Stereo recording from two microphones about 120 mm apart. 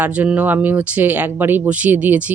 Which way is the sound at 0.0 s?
10° right (ahead or behind).